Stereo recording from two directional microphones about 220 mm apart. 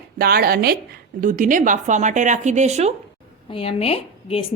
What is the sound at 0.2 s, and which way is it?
Speech, 45° right (ahead or behind).